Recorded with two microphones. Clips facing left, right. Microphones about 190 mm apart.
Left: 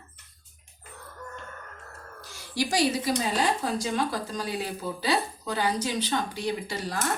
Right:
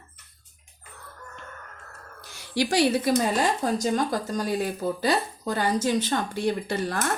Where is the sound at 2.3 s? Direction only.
65° right (ahead or behind).